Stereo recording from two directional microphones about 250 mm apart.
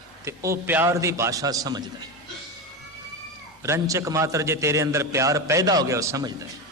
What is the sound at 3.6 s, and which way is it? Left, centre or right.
A man's voice, centre.